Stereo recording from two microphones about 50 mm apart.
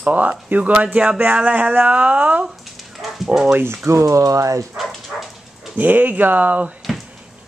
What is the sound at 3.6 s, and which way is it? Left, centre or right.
Speech, right.